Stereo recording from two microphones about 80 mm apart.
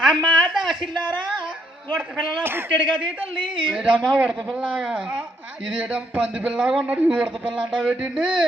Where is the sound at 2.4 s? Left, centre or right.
Right.